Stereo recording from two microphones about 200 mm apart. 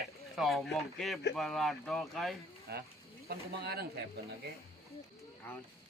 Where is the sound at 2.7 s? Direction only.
50° right (ahead or behind).